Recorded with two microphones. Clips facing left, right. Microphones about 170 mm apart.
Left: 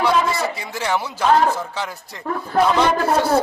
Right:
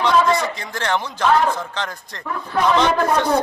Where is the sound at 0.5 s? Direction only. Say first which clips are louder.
Even; 10° left (ahead or behind).